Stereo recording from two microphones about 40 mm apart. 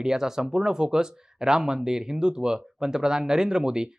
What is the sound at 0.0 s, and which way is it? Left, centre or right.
Speech, centre.